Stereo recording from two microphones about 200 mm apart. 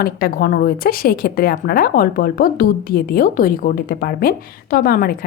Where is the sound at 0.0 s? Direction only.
50° left (ahead or behind).